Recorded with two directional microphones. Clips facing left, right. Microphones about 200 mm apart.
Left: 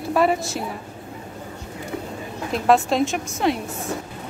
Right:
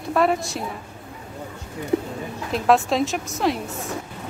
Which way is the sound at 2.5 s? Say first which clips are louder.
Left 1 dB; centre (ahead or behind).